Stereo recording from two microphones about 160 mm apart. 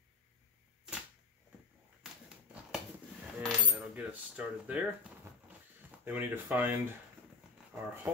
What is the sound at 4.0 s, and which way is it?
Speech, 10° right (ahead or behind).